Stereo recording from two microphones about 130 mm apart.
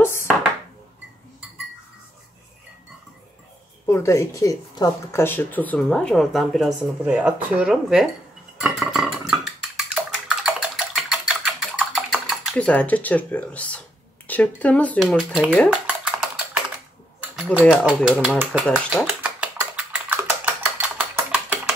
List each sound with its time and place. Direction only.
0.0 s chopping: 20° left (ahead or behind)
3.8 s speech: 20° left (ahead or behind)
5.2 s speech: 15° left (ahead or behind); by 8.1 s 5° right (ahead or behind)
8.5 s a sound: centre (ahead or behind)
12.5 s speech: 10° left (ahead or behind)
15.0 s speech: 5° right (ahead or behind)
15.7 s typing: 10° right (ahead or behind)
17.6 s speech: 10° right (ahead or behind)
19.0 s typing: 15° right (ahead or behind)